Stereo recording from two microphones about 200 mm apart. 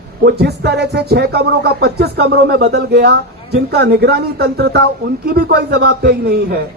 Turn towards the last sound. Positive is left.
turn(degrees=-50)  # may be behind; listen again after turning